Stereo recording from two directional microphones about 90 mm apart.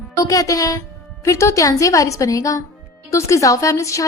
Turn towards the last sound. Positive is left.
turn(degrees=35)  # may be behind; listen again after turning